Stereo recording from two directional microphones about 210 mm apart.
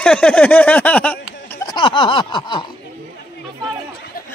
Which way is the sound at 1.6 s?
20° left (ahead or behind).